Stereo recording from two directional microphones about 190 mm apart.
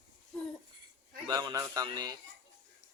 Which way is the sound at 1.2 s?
20° right (ahead or behind).